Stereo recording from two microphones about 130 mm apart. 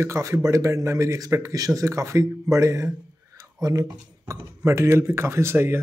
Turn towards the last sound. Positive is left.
turn(degrees=-20)  # may be behind; listen again after turning